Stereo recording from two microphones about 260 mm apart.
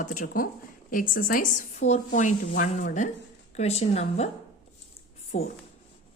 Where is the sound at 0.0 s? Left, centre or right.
Left.